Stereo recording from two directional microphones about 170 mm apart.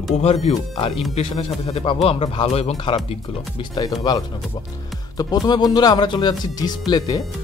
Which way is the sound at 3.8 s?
25° left (ahead or behind).